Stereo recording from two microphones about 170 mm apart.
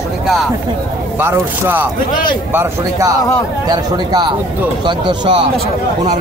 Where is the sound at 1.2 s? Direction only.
15° right (ahead or behind).